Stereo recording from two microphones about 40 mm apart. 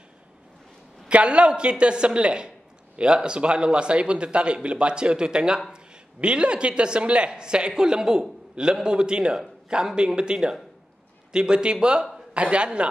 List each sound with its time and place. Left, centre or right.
1.0 s speech: right